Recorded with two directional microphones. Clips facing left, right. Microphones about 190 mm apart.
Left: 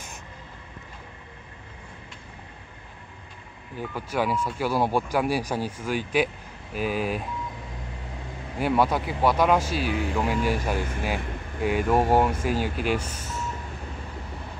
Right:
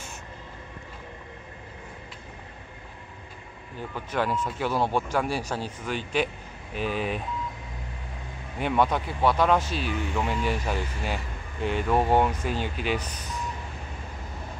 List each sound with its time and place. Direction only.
3.7 s speech: 10° left (ahead or behind)
8.5 s speech: 5° left (ahead or behind)